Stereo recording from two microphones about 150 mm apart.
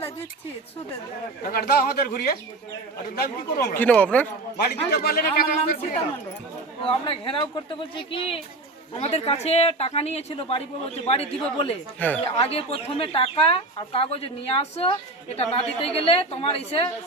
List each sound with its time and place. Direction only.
1.5 s speech: 80° left
3.8 s speech: 10° left (ahead or behind)
4.6 s a man's voice: 85° left
6.8 s a woman's voice: 40° left (ahead or behind)
11.9 s speech: 10° left (ahead or behind)
12.2 s speech: 40° left (ahead or behind)